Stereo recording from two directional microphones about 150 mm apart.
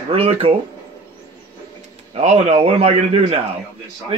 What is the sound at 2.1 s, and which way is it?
A man's voice, 45° right (ahead or behind).